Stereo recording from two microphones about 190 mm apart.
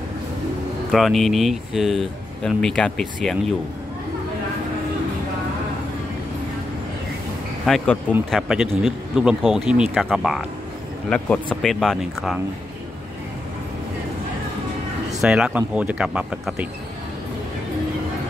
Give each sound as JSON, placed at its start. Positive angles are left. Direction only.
{"t": 0.9, "sound": "speech", "side_deg": 0}
{"t": 7.6, "sound": "speech", "side_deg": 5}
{"t": 15.2, "sound": "speech", "side_deg": -5}